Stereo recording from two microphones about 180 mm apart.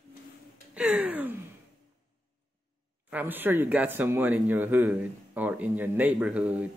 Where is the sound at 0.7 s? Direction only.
5° right (ahead or behind).